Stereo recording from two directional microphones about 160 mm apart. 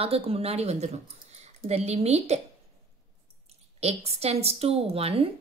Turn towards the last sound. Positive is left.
turn(degrees=-35)  # may be behind; listen again after turning